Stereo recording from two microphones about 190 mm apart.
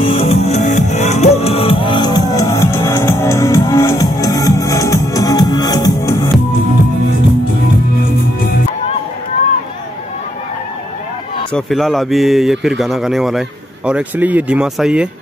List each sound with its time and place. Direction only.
0.0 s music: 30° left (ahead or behind)
11.5 s speech: centre (ahead or behind)